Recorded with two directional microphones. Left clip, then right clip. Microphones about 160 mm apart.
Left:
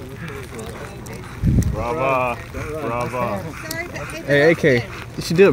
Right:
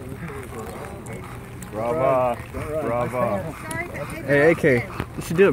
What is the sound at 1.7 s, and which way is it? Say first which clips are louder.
Speech: even; 35° right (ahead or behind).